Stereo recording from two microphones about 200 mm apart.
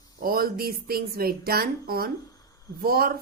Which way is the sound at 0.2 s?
45° right (ahead or behind).